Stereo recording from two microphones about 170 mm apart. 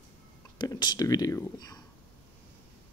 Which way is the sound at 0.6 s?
25° left (ahead or behind).